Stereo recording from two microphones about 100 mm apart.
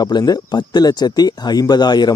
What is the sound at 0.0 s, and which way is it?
Speech, 40° left (ahead or behind).